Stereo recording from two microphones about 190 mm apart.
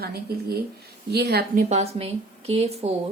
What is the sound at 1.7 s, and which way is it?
Speech, 35° right (ahead or behind).